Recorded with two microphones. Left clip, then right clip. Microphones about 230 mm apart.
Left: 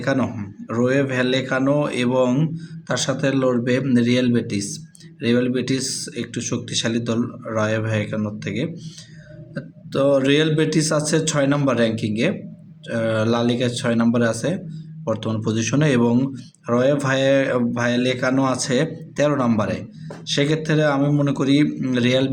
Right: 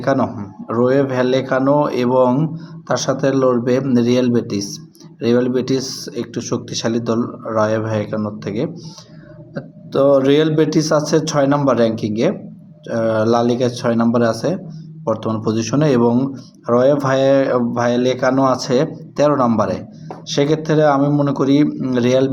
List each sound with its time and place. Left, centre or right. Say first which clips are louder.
0.0 s speech: right 5 dB; left